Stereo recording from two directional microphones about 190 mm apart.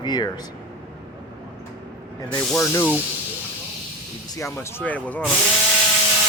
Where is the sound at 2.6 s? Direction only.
15° left (ahead or behind).